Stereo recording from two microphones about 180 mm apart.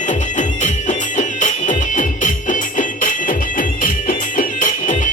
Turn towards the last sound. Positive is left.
turn(degrees=45)  # may be behind; listen again after turning